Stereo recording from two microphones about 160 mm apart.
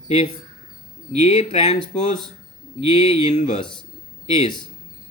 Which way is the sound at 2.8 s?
35° left (ahead or behind).